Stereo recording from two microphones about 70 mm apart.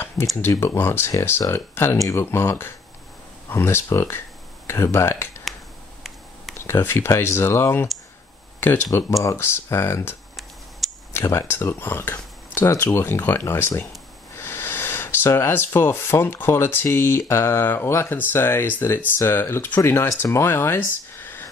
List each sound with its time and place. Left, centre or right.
0.4 s speech: left
6.6 s speech: left
8.9 s speech: left
10.8 s a sound: centre
11.3 s speech: left